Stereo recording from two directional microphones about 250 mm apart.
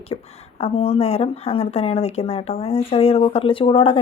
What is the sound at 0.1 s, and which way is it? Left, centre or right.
Speech, left.